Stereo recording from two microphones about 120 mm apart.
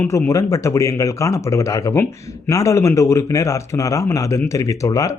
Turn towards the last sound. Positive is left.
turn(degrees=30)  # may be behind; listen again after turning